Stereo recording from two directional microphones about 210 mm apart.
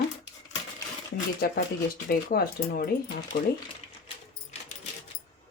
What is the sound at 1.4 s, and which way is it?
Speech, 45° left (ahead or behind).